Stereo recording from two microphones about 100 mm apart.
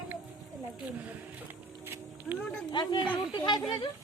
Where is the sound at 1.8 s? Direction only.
25° right (ahead or behind).